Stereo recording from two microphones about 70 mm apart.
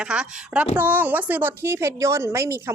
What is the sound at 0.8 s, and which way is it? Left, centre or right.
A woman's voice, right.